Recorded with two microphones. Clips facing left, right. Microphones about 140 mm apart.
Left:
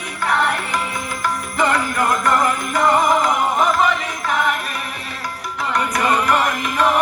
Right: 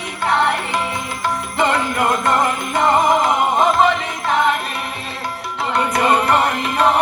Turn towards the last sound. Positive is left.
turn(degrees=-30)  # may be behind; listen again after turning